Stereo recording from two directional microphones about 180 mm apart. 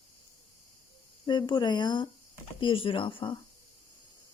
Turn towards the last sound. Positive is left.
turn(degrees=30)  # may be behind; listen again after turning